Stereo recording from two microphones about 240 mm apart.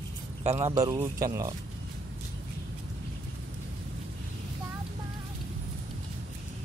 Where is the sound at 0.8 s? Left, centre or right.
Centre.